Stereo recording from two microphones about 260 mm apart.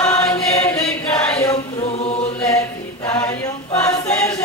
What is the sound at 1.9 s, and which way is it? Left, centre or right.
Chant, left.